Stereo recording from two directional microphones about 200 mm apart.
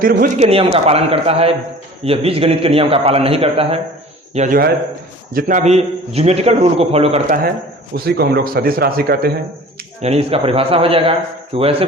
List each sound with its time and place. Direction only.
0.0 s speech: 45° right (ahead or behind)
0.4 s a man's voice: 30° right (ahead or behind)
4.4 s a man's voice: 45° right (ahead or behind)
7.9 s speech: 50° right (ahead or behind)
10.0 s a man's voice: 30° right (ahead or behind)